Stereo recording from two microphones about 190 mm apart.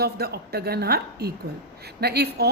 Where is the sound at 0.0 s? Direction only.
55° right (ahead or behind).